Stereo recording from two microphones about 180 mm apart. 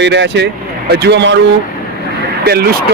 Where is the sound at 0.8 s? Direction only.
65° right (ahead or behind).